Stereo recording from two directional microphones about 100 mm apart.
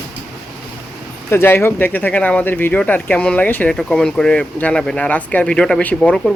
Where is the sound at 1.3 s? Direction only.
25° left (ahead or behind).